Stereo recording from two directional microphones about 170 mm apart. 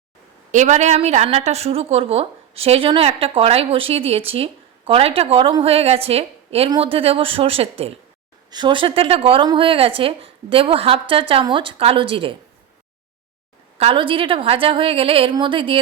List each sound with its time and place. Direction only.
0.5 s a woman's voice: 45° right (ahead or behind)
13.7 s a woman's voice: 35° right (ahead or behind)